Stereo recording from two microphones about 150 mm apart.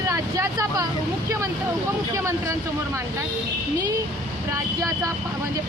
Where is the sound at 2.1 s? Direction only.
20° right (ahead or behind).